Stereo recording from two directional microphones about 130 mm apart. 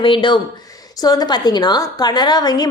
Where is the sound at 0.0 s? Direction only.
40° left (ahead or behind).